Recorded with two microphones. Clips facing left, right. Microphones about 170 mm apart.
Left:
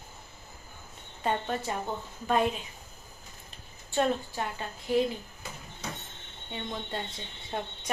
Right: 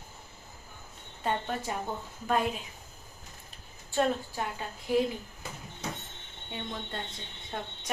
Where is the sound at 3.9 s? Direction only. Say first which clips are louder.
Left 1 dB; 5° right (ahead or behind).